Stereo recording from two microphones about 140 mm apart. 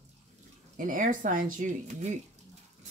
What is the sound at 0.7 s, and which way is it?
Speech, 70° right (ahead or behind).